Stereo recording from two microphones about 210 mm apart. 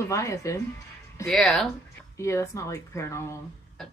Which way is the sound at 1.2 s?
Centre (ahead or behind).